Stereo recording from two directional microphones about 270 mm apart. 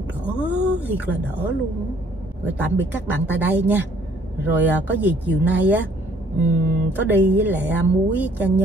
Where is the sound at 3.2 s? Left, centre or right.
Centre.